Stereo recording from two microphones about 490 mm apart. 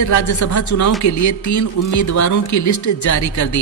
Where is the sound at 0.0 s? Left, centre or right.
Left.